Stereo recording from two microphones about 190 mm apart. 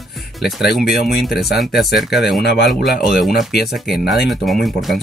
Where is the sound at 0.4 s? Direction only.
Centre (ahead or behind).